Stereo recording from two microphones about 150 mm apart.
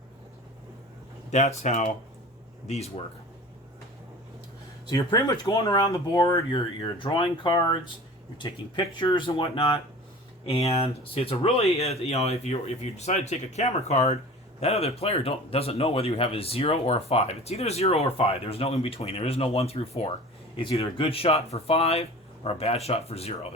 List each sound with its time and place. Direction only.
1.3 s speech: 50° left (ahead or behind)
4.9 s speech: 25° left (ahead or behind); by 23.5 s 45° left (ahead or behind)